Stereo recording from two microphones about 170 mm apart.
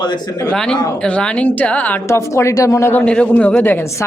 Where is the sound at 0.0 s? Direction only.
25° left (ahead or behind).